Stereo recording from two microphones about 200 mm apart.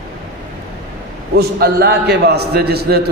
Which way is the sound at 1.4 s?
55° right (ahead or behind).